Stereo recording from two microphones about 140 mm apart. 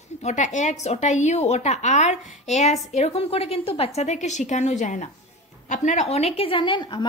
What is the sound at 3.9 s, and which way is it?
A woman's voice, 55° left (ahead or behind).